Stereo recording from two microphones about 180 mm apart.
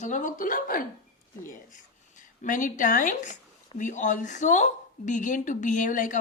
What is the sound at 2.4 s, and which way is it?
A woman's voice, 45° left (ahead or behind).